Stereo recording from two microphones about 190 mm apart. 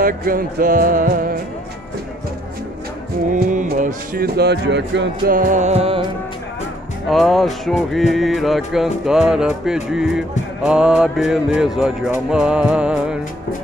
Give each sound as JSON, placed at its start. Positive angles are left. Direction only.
{"t": 0.0, "sound": "music", "side_deg": -50}
{"t": 3.3, "sound": "speech", "side_deg": -45}
{"t": 5.3, "sound": "music", "side_deg": -45}
{"t": 7.1, "sound": "music", "side_deg": 0}